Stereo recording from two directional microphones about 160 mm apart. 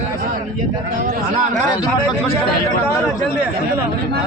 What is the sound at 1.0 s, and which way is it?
Speech, 55° right (ahead or behind).